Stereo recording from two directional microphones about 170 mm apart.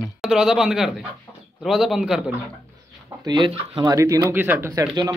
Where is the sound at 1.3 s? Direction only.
15° left (ahead or behind).